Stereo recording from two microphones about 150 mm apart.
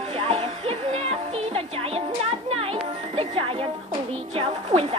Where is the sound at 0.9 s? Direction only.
40° right (ahead or behind).